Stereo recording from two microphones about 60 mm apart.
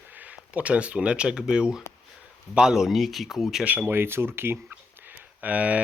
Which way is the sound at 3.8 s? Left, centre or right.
Right.